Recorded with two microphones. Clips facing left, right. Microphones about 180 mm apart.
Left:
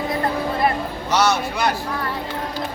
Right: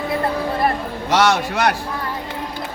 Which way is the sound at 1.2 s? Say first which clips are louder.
Right 2 dB; 80° right.